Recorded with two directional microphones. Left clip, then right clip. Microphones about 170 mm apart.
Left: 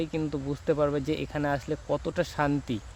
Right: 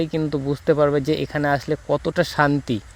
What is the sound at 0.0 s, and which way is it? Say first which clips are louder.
Speech: right 8 dB; 45° right (ahead or behind).